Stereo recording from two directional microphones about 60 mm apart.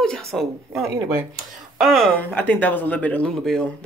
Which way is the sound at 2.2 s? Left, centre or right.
Left.